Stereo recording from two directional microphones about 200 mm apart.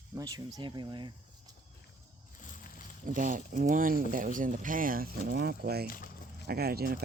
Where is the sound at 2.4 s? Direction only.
40° left (ahead or behind).